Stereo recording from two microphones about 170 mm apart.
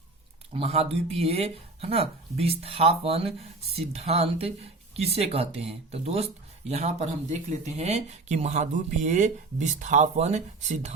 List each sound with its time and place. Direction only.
0.5 s speech: 35° right (ahead or behind)